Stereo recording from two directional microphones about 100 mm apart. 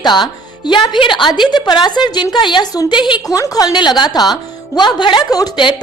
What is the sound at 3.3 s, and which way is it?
A woman's voice, 35° left (ahead or behind).